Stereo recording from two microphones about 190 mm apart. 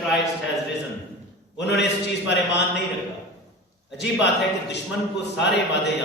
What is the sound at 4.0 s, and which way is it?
Speech, 65° left (ahead or behind).